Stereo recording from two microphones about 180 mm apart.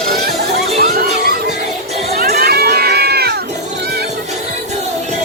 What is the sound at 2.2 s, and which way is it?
Run, 60° right (ahead or behind).